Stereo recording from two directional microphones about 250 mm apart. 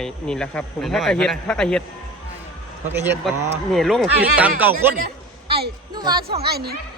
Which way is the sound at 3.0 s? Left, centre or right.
Centre.